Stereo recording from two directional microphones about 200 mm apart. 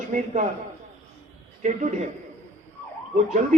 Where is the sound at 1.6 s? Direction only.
35° right (ahead or behind).